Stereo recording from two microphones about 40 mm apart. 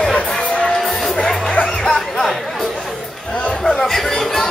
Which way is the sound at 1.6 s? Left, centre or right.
Centre.